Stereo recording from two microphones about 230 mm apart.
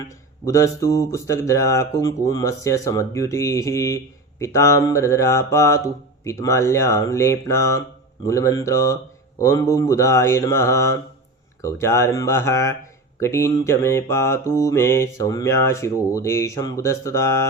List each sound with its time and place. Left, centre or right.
0.4 s speech: centre